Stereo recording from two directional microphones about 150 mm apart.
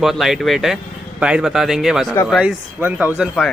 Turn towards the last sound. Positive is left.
turn(degrees=-10)  # may be behind; listen again after turning